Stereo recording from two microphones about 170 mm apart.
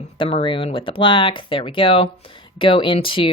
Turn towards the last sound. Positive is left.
turn(degrees=30)  # may be behind; listen again after turning